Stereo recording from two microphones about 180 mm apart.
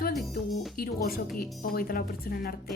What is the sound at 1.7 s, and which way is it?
Speech, 55° left (ahead or behind).